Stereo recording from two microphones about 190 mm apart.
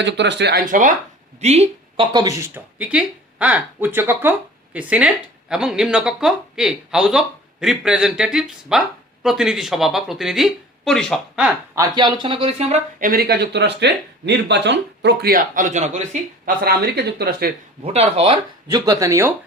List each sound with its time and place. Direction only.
0.0 s speech: 65° right (ahead or behind)
0.7 s a woman's voice: 45° right (ahead or behind)
2.1 s speech: 15° right (ahead or behind)
11.7 s speech: 20° right (ahead or behind); by 16.0 s 40° right (ahead or behind)
16.6 s speech: 60° right (ahead or behind)
17.8 s speech: 35° right (ahead or behind)
18.7 s speech: 20° right (ahead or behind)